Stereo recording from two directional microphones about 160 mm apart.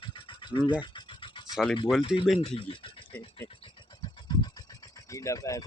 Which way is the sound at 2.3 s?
40° left (ahead or behind).